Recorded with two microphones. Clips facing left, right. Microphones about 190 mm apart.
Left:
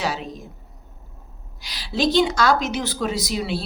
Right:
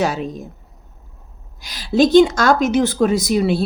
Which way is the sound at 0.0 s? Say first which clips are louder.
Right 7 dB; 50° right (ahead or behind).